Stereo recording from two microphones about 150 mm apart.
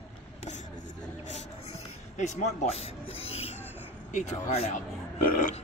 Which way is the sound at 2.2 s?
45° left (ahead or behind).